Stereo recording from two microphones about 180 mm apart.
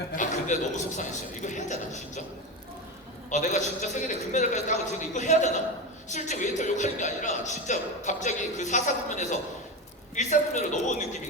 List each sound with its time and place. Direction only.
0.2 s a man's voice: 45° left (ahead or behind)
3.2 s a man's voice: 40° left (ahead or behind)